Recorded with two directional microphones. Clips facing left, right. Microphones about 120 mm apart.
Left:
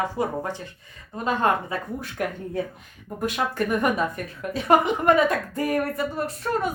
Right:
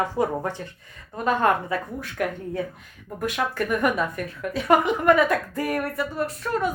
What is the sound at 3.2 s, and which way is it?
A woman's voice, 20° left (ahead or behind).